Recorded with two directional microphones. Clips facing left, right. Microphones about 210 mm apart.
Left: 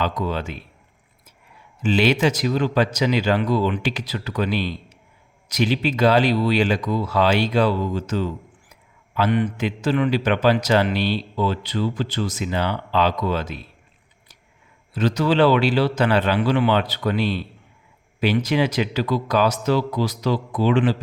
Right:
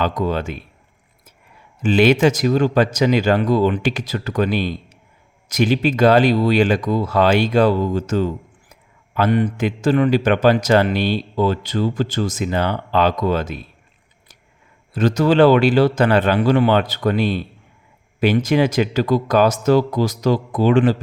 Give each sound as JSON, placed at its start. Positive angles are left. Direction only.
{"t": 0.0, "sound": "a man's voice", "side_deg": -45}
{"t": 1.8, "sound": "a man's voice", "side_deg": -50}
{"t": 14.9, "sound": "a man's voice", "side_deg": -45}